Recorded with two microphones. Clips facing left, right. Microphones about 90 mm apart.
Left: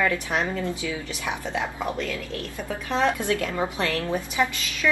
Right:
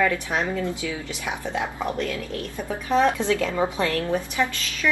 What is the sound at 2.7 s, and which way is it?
Speech, 10° right (ahead or behind).